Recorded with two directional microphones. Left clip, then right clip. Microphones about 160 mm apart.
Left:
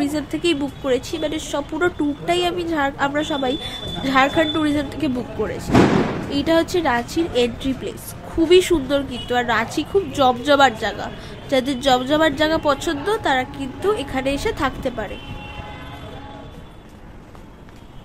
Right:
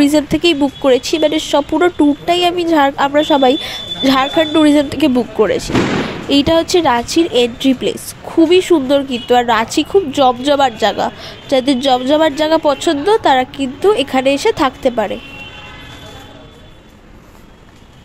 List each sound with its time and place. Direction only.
0.0 s speech: 50° right (ahead or behind)